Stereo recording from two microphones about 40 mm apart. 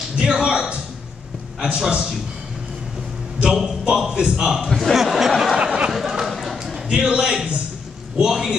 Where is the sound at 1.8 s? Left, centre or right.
Centre.